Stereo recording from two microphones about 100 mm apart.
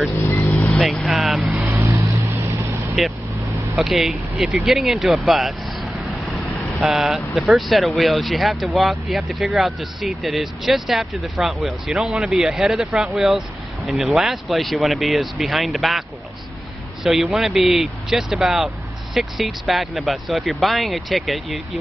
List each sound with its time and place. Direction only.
0.2 s vehicle: 25° left (ahead or behind)
1.1 s vehicle: centre (ahead or behind)
1.5 s vehicle: 25° right (ahead or behind)
3.7 s speech: centre (ahead or behind)
17.0 s speech: centre (ahead or behind)